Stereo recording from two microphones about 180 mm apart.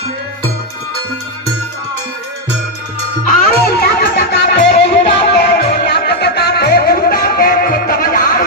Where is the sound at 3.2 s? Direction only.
50° left (ahead or behind).